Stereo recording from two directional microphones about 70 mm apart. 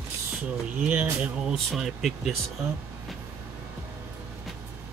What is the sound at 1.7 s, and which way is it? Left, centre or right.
Speech, centre.